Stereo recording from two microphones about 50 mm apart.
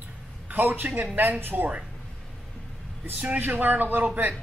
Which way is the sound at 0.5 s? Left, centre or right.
Right.